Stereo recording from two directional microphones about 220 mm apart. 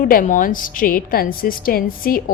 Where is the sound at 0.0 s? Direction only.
40° left (ahead or behind).